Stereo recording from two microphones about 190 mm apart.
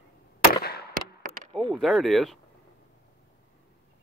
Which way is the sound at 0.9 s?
50° right (ahead or behind).